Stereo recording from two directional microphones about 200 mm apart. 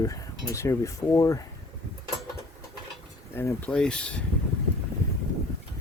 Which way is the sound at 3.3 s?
10° left (ahead or behind).